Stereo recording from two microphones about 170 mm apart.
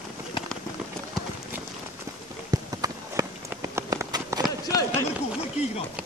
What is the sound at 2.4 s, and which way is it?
Run, 20° right (ahead or behind).